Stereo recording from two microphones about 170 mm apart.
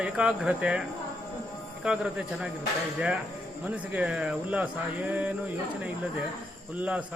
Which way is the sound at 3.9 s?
5° right (ahead or behind).